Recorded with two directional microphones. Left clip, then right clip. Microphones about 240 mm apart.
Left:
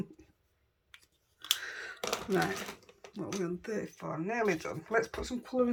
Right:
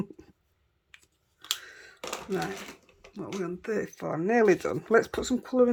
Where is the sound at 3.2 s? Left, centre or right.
Centre.